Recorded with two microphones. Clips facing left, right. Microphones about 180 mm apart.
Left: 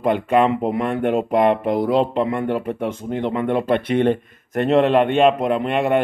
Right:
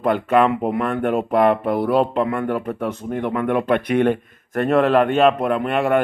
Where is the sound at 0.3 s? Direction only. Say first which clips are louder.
Right 1 dB; 5° right (ahead or behind).